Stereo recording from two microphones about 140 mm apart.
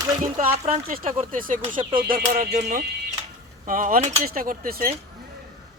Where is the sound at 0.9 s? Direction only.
70° right (ahead or behind).